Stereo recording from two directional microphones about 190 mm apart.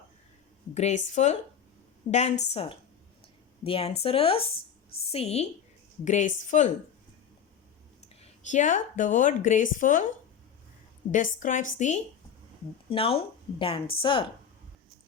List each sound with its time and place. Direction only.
0.7 s a woman's voice: 35° left (ahead or behind)
8.1 s a woman's voice: 35° left (ahead or behind)
11.1 s a woman's voice: 45° left (ahead or behind)
12.9 s speech: 30° left (ahead or behind)